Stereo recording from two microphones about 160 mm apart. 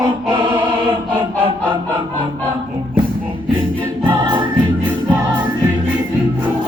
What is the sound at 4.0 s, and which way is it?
Choir, 30° right (ahead or behind).